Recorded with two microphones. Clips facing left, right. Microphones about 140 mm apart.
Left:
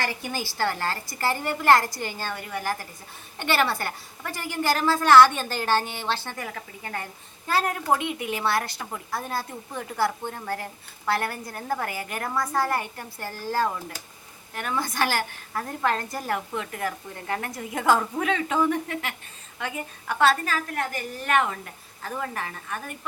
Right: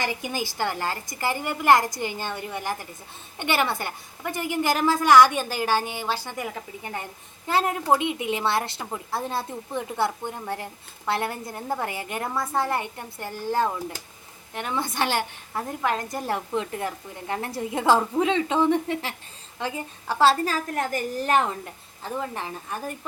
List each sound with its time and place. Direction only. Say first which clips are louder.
0.0 s a woman's voice: right 2 dB; 15° right (ahead or behind); by 23.0 s 30° right (ahead or behind)